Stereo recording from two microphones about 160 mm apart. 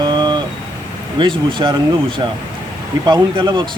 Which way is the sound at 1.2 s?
30° right (ahead or behind).